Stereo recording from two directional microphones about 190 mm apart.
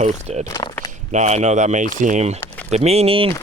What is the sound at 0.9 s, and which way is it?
Speech, 35° right (ahead or behind).